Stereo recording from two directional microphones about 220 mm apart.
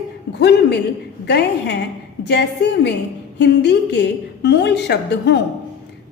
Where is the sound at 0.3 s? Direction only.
50° left (ahead or behind).